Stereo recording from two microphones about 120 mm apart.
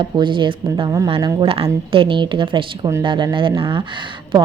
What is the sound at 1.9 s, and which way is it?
A woman's voice, 45° right (ahead or behind).